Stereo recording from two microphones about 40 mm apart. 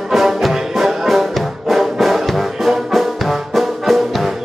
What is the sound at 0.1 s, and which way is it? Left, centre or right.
Music, centre.